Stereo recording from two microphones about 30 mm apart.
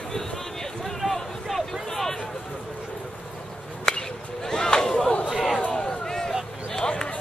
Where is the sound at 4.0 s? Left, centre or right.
Left.